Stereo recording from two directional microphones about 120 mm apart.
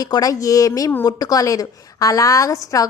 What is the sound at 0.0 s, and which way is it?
A woman's voice, 30° left (ahead or behind).